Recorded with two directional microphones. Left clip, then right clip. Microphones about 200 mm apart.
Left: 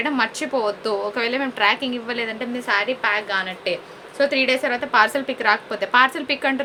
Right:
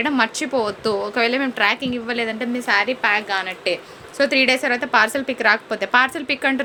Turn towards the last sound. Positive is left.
turn(degrees=-30)  # may be behind; listen again after turning